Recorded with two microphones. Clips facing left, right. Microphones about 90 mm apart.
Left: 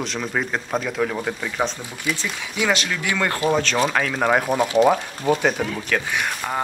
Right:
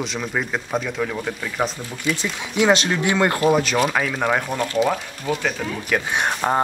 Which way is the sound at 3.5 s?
10° right (ahead or behind).